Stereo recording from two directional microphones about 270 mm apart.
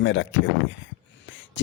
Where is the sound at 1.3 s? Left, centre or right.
Left.